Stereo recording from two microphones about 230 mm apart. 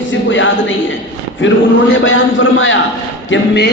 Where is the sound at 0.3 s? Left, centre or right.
Left.